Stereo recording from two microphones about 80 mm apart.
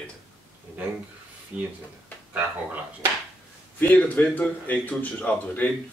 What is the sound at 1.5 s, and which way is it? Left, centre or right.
Speech, centre.